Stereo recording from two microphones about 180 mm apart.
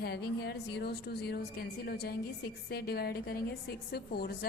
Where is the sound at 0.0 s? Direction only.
65° left (ahead or behind).